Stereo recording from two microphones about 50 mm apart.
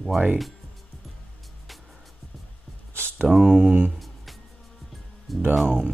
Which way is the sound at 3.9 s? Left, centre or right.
Centre.